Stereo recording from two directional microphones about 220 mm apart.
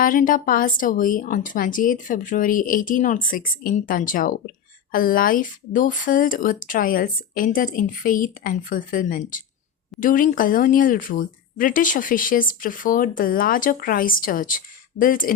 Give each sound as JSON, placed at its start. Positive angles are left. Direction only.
{"t": 0.0, "sound": "speech", "side_deg": 40}